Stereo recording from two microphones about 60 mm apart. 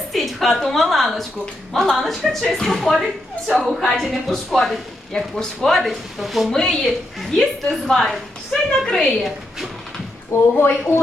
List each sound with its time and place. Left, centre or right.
0.1 s a woman's voice: centre
3.8 s speech: centre
6.5 s a woman's voice: centre
10.3 s speech: left